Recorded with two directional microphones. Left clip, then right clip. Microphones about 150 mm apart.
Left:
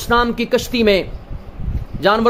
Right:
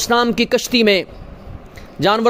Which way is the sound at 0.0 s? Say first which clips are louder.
Right 1 dB; 45° right (ahead or behind).